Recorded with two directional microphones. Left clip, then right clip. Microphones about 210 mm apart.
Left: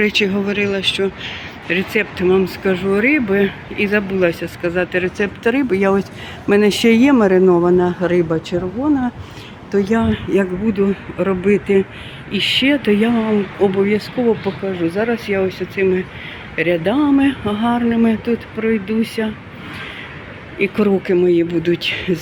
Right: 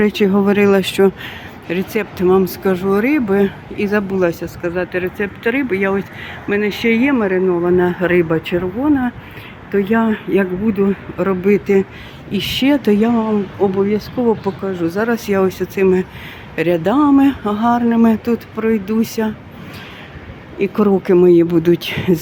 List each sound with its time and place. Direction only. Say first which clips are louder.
0.0 s speech: right 2 dB; 25° right (ahead or behind)
1.7 s speech: left 2 dB; 10° right (ahead or behind)
4.6 s speech: left 1 dB; centre (ahead or behind)
6.5 s speech: left 3 dB; 20° left (ahead or behind)
7.7 s speech: right 1 dB; centre (ahead or behind)
15.1 s speech: right 2 dB; 20° right (ahead or behind)
20.6 s speech: right 1 dB; 10° right (ahead or behind)